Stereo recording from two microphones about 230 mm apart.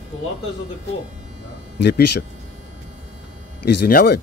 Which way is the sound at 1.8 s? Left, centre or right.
Left.